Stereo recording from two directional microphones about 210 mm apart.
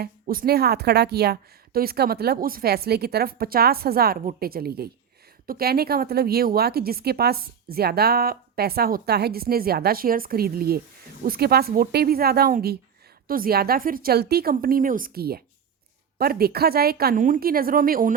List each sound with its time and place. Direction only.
0.0 s a woman's voice: 45° right (ahead or behind)